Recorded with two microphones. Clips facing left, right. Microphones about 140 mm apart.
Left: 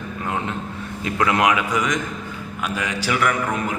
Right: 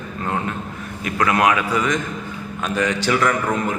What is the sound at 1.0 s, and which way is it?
A man's voice, 20° left (ahead or behind).